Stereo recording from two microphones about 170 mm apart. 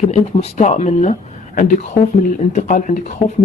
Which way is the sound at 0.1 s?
40° left (ahead or behind).